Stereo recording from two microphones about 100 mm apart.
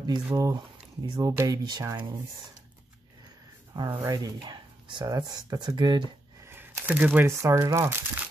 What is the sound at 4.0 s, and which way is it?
Speech, 35° right (ahead or behind).